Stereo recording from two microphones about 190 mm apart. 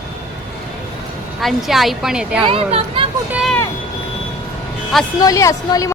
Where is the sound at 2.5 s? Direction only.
30° right (ahead or behind).